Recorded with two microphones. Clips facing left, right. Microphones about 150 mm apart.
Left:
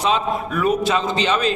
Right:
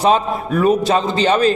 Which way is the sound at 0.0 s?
35° right (ahead or behind).